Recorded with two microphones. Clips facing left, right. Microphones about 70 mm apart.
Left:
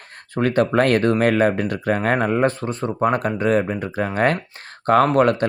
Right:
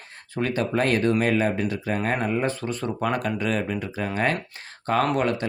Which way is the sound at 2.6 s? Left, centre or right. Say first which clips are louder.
Left 5 dB; left.